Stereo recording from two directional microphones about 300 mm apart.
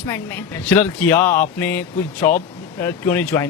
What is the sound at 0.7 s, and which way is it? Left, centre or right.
Speech, centre.